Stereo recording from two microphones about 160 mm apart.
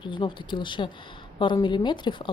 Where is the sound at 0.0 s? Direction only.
30° left (ahead or behind).